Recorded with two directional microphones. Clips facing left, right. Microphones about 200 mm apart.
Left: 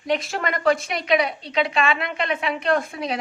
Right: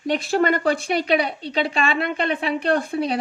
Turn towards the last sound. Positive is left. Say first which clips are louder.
# right 2 dB
turn(degrees=-35)  # may be behind; listen again after turning